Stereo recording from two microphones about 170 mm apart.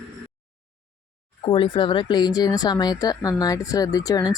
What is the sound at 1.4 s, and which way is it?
Speech, 30° left (ahead or behind).